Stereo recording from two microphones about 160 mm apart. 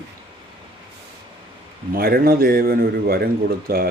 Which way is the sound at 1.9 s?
70° right (ahead or behind).